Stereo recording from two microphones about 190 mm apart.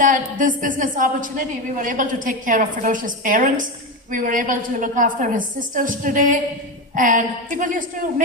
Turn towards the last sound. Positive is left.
turn(degrees=-45)  # may be behind; listen again after turning